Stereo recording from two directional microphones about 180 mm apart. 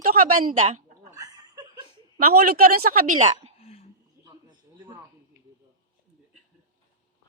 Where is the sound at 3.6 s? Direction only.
35° left (ahead or behind).